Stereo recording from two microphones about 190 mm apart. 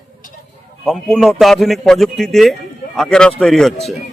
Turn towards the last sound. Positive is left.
turn(degrees=0)  # may be behind; listen again after turning